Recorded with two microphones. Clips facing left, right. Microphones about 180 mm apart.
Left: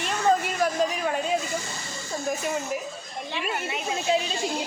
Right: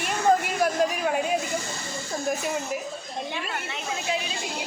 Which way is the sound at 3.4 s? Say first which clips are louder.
Left 3 dB; 15° left (ahead or behind).